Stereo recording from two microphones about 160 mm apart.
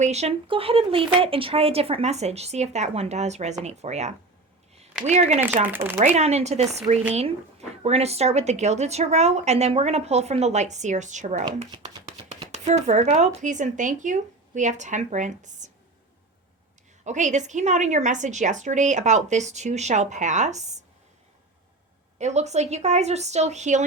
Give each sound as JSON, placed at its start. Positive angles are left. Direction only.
{"t": 0.0, "sound": "a woman's voice", "side_deg": -45}
{"t": 5.6, "sound": "speech", "side_deg": -15}
{"t": 6.0, "sound": "a woman's voice", "side_deg": -45}
{"t": 11.7, "sound": "chopping", "side_deg": -25}
{"t": 12.5, "sound": "a woman's voice", "side_deg": -45}
{"t": 17.0, "sound": "a woman's voice", "side_deg": -50}
{"t": 22.2, "sound": "a woman's voice", "side_deg": -45}